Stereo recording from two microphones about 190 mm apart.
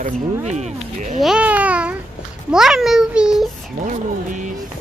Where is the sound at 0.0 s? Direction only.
40° right (ahead or behind).